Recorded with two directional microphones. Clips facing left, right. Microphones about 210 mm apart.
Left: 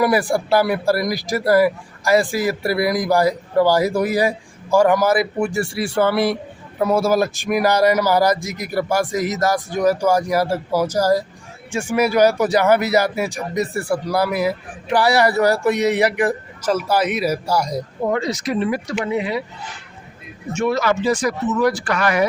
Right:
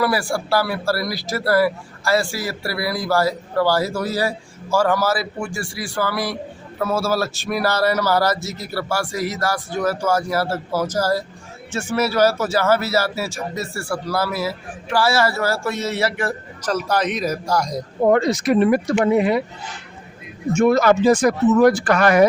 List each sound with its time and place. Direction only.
0.0 s speech: 20° left (ahead or behind)
18.1 s speech: 55° right (ahead or behind)
20.5 s speech: 45° right (ahead or behind)